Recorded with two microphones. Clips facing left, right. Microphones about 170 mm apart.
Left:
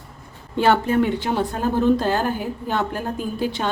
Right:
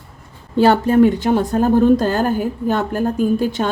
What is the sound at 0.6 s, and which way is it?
A woman's voice, 40° right (ahead or behind).